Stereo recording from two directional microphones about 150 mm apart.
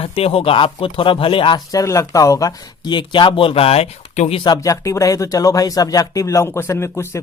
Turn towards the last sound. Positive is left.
turn(degrees=20)  # may be behind; listen again after turning